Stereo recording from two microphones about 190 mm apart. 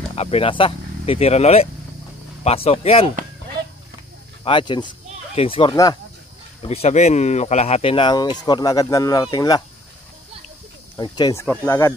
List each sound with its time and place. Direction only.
0.1 s speech: 30° left (ahead or behind)
4.5 s speech: 25° left (ahead or behind)
11.0 s speech: 25° left (ahead or behind)
11.4 s speech: 10° left (ahead or behind)